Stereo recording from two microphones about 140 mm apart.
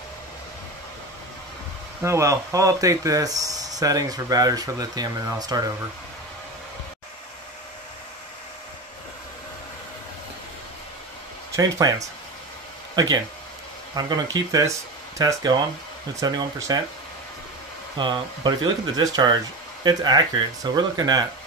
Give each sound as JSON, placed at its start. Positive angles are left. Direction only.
{"t": 2.0, "sound": "speech", "side_deg": -20}
{"t": 11.5, "sound": "speech", "side_deg": -25}
{"t": 13.9, "sound": "speech", "side_deg": -25}
{"t": 17.9, "sound": "speech", "side_deg": -35}